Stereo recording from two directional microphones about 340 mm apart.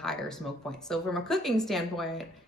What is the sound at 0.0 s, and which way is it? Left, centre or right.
A man's voice, centre.